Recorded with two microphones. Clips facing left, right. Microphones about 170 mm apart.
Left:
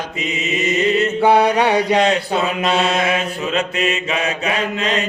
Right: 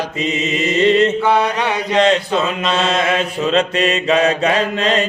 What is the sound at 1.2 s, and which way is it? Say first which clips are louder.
Mantra: left 3 dB; 35° left (ahead or behind).